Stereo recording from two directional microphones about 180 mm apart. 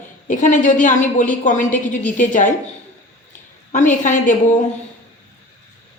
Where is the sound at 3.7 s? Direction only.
45° left (ahead or behind).